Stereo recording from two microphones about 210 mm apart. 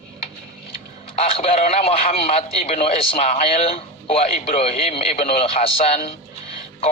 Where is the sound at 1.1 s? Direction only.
30° left (ahead or behind).